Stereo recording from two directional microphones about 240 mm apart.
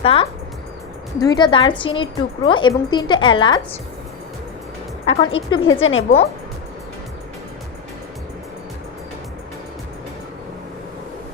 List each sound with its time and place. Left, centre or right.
0.0 s a woman's voice: left
5.0 s a woman's voice: left
5.8 s a woman's voice: left